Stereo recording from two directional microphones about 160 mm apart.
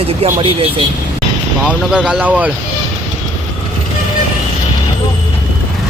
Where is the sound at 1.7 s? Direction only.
5° right (ahead or behind).